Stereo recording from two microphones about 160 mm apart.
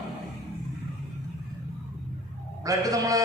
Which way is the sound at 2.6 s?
20° right (ahead or behind).